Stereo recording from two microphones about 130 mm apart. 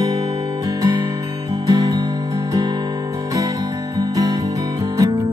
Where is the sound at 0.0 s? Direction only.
30° right (ahead or behind).